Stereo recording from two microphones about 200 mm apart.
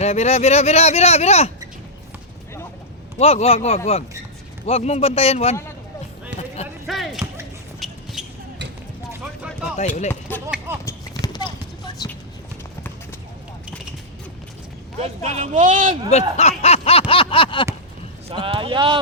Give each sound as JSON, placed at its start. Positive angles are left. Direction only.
{"t": 0.0, "sound": "speech", "side_deg": 30}
{"t": 3.2, "sound": "speech", "side_deg": 30}
{"t": 6.8, "sound": "a sound", "side_deg": 0}
{"t": 8.2, "sound": "basketball bounce", "side_deg": -5}
{"t": 9.7, "sound": "speech", "side_deg": 35}
{"t": 10.1, "sound": "a sound", "side_deg": 10}
{"t": 10.4, "sound": "clip-clop", "side_deg": -10}
{"t": 10.8, "sound": "clip-clop", "side_deg": 20}
{"t": 15.0, "sound": "speech", "side_deg": -35}
{"t": 16.0, "sound": "a sound", "side_deg": 30}
{"t": 18.3, "sound": "speech", "side_deg": -25}